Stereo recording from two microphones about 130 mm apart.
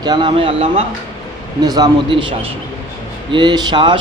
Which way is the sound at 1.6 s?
30° right (ahead or behind).